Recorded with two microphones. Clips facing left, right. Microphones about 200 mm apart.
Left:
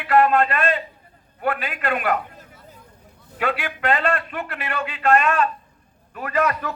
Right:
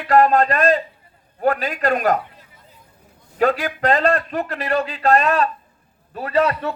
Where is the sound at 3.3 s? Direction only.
40° right (ahead or behind).